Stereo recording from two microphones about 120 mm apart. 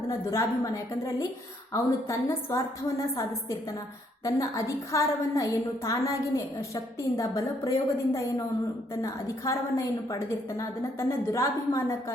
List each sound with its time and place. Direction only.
0.1 s a woman's voice: 25° left (ahead or behind)
4.2 s a woman's voice: 25° left (ahead or behind)
11.3 s a woman's voice: 25° left (ahead or behind)